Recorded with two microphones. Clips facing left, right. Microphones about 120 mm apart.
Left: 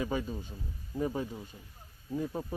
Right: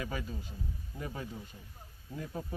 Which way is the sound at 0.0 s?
25° left (ahead or behind).